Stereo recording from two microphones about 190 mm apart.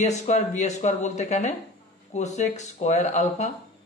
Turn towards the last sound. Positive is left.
turn(degrees=35)  # may be behind; listen again after turning